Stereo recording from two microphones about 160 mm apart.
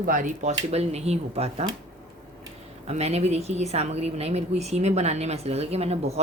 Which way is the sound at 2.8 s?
40° right (ahead or behind).